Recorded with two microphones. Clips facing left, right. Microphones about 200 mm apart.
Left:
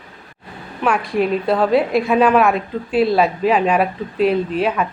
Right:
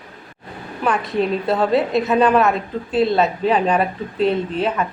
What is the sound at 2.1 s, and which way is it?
Speech, 5° left (ahead or behind).